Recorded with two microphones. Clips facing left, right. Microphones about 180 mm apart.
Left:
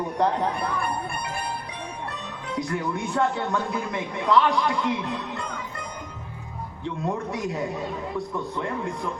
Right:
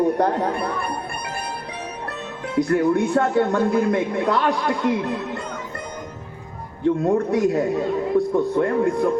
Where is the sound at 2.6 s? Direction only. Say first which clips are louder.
Right 10 dB; 60° right (ahead or behind).